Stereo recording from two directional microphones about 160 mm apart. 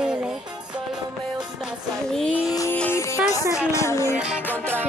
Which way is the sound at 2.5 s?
20° left (ahead or behind).